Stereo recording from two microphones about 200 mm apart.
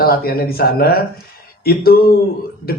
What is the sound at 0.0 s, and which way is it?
A woman's voice, 50° left (ahead or behind).